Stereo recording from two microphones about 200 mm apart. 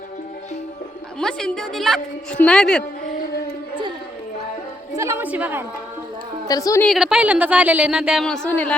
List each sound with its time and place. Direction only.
1.2 s speech: 5° left (ahead or behind)
4.9 s a woman's voice: 15° right (ahead or behind)
6.5 s a woman's voice: 15° left (ahead or behind)
6.8 s speech: centre (ahead or behind)